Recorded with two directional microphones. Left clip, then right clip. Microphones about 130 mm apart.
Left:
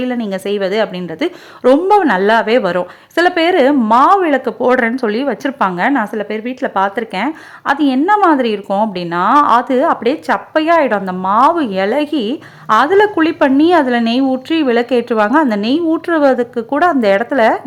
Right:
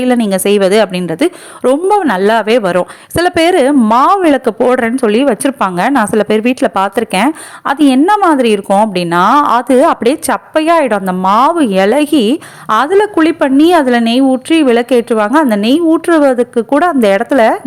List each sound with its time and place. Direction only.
0.0 s a woman's voice: 35° right (ahead or behind)
6.2 s speech: 50° right (ahead or behind)
6.5 s a woman's voice: 30° right (ahead or behind)